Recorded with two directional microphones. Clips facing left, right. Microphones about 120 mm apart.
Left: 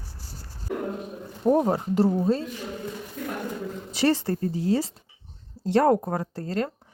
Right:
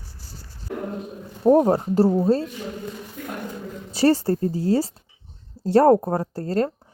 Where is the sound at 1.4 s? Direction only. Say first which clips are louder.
Right 5 dB; 40° right (ahead or behind).